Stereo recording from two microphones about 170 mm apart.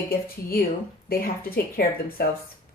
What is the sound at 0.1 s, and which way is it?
Speech, 60° left (ahead or behind).